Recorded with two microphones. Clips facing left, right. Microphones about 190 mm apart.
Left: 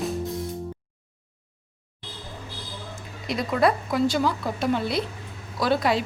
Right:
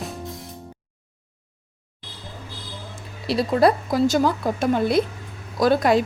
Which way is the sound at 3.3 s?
35° right (ahead or behind).